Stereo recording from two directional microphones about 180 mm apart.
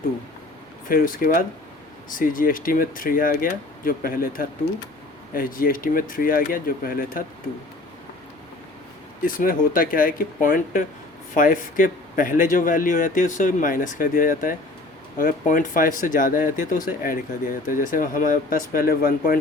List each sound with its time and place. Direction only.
0.9 s speech: 50° left (ahead or behind)
9.2 s speech: 50° left (ahead or behind)